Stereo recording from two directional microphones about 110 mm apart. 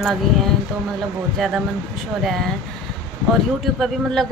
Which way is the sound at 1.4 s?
Centre (ahead or behind).